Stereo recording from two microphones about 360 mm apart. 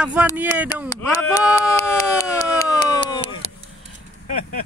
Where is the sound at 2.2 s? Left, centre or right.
Centre.